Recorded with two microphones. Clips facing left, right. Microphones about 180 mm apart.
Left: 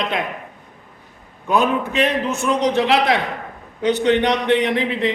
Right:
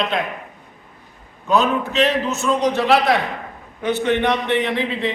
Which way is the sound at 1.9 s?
55° left (ahead or behind).